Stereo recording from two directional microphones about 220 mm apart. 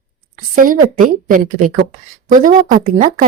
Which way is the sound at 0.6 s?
40° right (ahead or behind).